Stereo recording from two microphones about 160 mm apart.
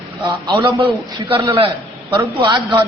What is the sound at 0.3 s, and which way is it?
A man's voice, 30° right (ahead or behind).